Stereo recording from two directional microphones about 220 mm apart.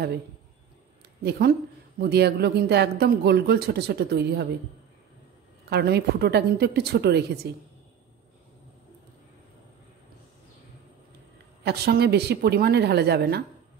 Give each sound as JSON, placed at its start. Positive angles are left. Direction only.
{"t": 2.0, "sound": "speech", "side_deg": -45}
{"t": 5.7, "sound": "speech", "side_deg": -45}
{"t": 11.6, "sound": "speech", "side_deg": -45}